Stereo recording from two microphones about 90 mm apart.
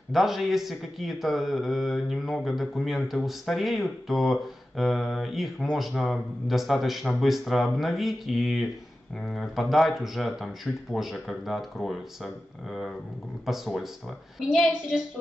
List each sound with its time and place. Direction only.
0.1 s speech: centre (ahead or behind)